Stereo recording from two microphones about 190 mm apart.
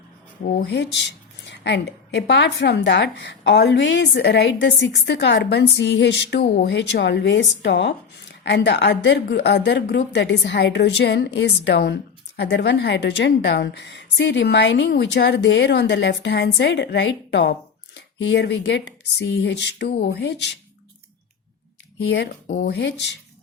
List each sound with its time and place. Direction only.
0.4 s a woman's voice: 65° left (ahead or behind)
22.0 s a woman's voice: 65° left (ahead or behind)